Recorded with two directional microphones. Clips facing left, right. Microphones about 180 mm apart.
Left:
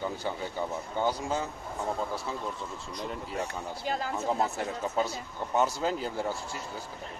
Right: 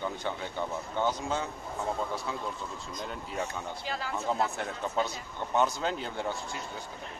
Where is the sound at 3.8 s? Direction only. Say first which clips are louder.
Left 6 dB; 45° left (ahead or behind).